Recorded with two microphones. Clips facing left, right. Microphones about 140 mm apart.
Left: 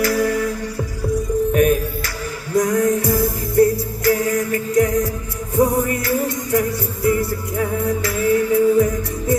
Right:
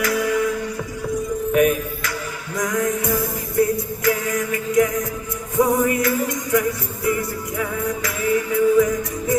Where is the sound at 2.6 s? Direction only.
35° left (ahead or behind).